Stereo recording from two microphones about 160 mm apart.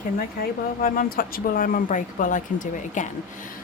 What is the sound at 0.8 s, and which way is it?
Speech, 60° left (ahead or behind).